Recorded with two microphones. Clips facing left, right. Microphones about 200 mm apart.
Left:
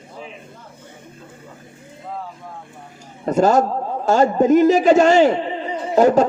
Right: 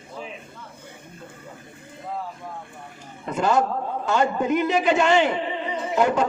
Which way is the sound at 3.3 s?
40° left (ahead or behind).